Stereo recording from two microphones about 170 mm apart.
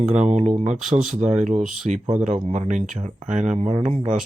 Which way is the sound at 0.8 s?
Centre (ahead or behind).